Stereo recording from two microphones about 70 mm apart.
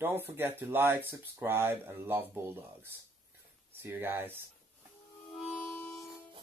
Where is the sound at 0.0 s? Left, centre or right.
Right.